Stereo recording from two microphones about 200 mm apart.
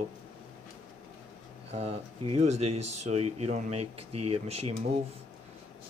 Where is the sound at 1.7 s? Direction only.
30° right (ahead or behind).